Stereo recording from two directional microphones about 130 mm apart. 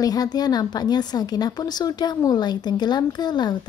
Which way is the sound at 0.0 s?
30° left (ahead or behind).